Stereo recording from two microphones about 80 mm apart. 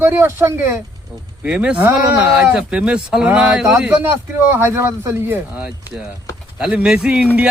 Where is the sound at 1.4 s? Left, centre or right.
Centre.